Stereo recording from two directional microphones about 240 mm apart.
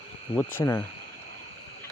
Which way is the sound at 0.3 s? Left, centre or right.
Centre.